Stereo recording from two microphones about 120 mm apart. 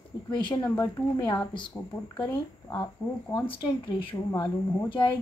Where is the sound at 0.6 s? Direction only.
20° left (ahead or behind).